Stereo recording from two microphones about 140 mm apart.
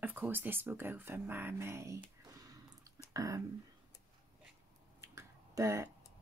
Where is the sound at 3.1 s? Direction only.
25° right (ahead or behind).